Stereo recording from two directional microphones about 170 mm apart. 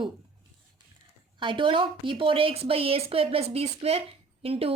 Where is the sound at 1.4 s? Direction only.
30° right (ahead or behind).